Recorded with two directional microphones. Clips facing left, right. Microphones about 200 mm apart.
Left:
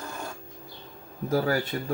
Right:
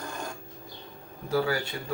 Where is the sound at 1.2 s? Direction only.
40° left (ahead or behind).